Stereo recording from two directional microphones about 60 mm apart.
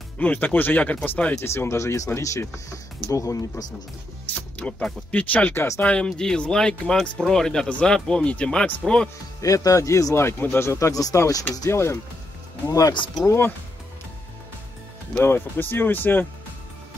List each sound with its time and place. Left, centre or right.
0.2 s speech: left
1.4 s speech: left
4.6 s speech: left
9.4 s a man's voice: left
10.2 s speech: left
10.6 s a man's voice: left
11.7 s speech: left
12.6 s speech: left
15.1 s speech: left